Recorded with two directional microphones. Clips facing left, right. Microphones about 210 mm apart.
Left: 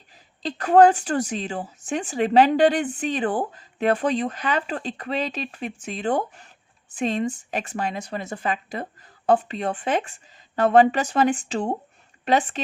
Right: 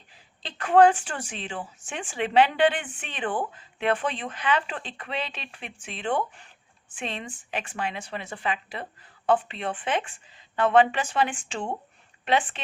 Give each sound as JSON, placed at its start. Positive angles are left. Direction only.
{"t": 0.4, "sound": "a woman's voice", "side_deg": 40}